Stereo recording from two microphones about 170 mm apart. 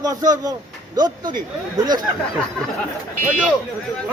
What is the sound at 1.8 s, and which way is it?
Speech, 25° right (ahead or behind).